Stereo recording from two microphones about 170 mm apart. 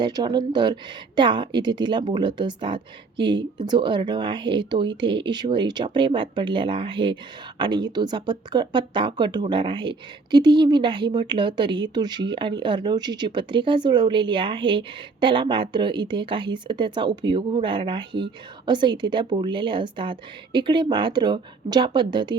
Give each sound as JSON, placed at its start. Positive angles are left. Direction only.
{"t": 0.0, "sound": "speech", "side_deg": -25}